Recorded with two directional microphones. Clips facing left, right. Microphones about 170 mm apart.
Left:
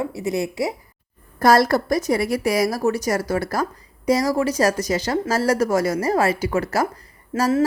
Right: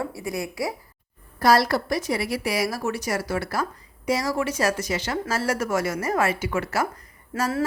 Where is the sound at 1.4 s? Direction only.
45° left (ahead or behind).